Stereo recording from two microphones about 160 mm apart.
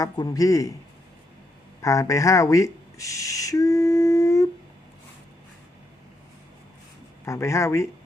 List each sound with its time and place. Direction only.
0.0 s a man's voice: 20° left (ahead or behind)
1.8 s speech: 20° left (ahead or behind)
7.3 s speech: 20° left (ahead or behind)